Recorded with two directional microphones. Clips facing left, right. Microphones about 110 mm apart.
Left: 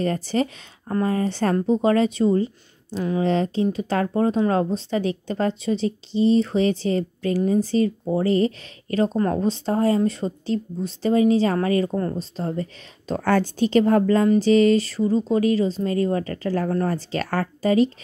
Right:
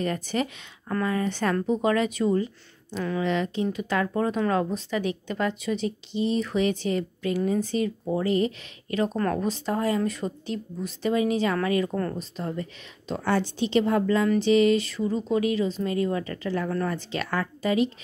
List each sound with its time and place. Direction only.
0.0 s a woman's voice: 35° left (ahead or behind)
13.1 s a woman's voice: 50° left (ahead or behind)